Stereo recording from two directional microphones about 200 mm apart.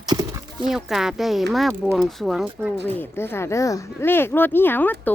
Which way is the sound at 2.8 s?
10° left (ahead or behind).